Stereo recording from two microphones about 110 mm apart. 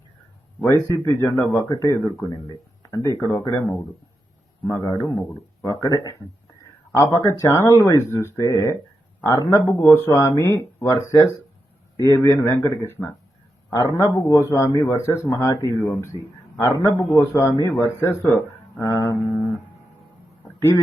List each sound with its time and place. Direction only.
0.6 s a man's voice: 25° left (ahead or behind)
1.7 s a man's voice: 35° left (ahead or behind)
4.6 s a man's voice: 40° left (ahead or behind)
15.9 s a man's voice: 20° left (ahead or behind)